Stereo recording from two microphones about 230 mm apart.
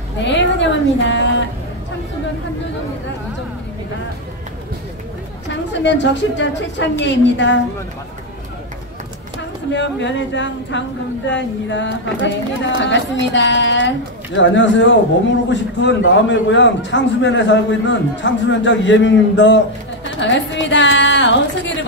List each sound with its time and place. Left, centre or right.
0.2 s a man's voice: left
5.7 s a man's voice: left
9.7 s a man's voice: left